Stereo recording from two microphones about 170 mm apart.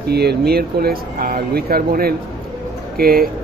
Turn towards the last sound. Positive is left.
turn(degrees=-60)  # may be behind; listen again after turning